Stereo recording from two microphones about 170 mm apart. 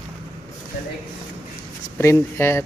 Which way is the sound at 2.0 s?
15° left (ahead or behind).